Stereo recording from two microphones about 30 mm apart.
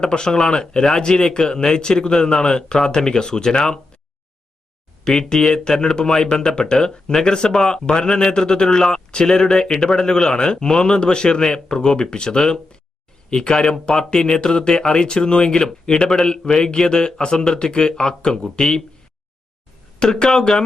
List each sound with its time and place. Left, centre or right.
0.0 s a man's voice: left
5.0 s a man's voice: centre
16.0 s a man's voice: centre
20.0 s a man's voice: left